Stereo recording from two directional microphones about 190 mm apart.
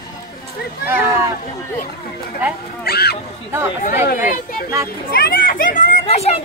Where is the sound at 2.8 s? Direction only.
55° left (ahead or behind).